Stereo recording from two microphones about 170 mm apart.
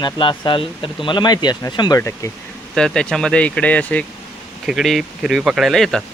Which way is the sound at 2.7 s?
5° left (ahead or behind).